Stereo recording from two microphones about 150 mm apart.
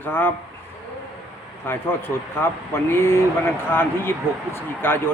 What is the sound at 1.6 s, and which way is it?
A man's voice, 15° left (ahead or behind).